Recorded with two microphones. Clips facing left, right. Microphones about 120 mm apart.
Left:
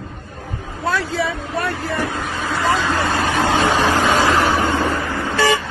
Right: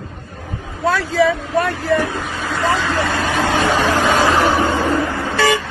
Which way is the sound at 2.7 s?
20° left (ahead or behind).